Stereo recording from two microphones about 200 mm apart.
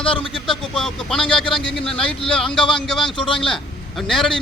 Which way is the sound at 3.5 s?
Centre (ahead or behind).